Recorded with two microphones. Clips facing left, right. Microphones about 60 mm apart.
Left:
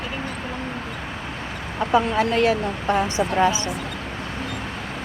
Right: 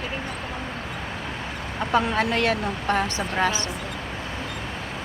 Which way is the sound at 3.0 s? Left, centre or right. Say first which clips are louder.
Left 4 dB; centre.